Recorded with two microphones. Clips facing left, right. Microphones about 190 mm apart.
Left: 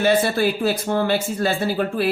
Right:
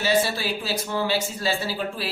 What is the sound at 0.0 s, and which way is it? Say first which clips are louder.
Speech: left 5 dB; 55° left (ahead or behind).